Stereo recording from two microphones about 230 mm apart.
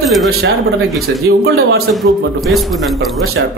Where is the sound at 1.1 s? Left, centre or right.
Right.